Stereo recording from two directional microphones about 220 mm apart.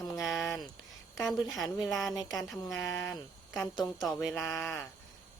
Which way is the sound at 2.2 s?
15° left (ahead or behind).